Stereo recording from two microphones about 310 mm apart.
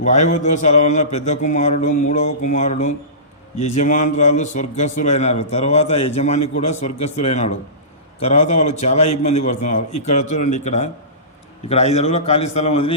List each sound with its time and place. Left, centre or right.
0.0 s a man's voice: left